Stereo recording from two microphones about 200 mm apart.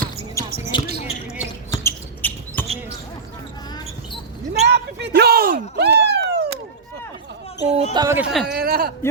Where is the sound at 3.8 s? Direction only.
25° left (ahead or behind).